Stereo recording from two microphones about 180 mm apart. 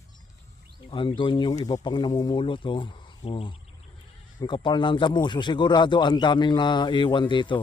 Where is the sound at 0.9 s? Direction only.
25° left (ahead or behind).